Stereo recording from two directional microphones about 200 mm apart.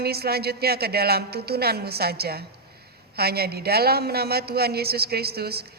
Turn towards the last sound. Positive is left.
turn(degrees=-50)  # may be behind; listen again after turning